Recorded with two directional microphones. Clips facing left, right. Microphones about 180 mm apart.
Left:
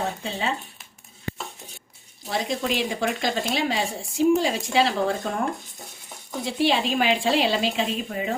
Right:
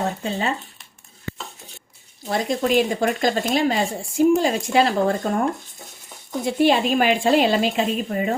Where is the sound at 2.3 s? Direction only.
50° right (ahead or behind).